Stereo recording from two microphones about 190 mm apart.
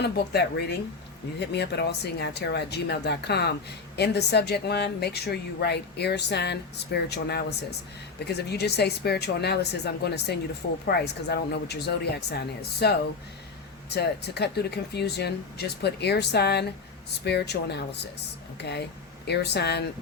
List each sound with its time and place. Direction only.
0.0 s a woman's voice: 60° left (ahead or behind)